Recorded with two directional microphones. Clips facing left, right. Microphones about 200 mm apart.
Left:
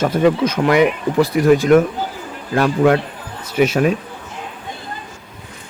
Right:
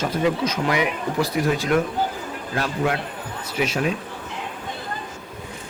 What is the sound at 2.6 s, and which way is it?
Speech, 60° left (ahead or behind).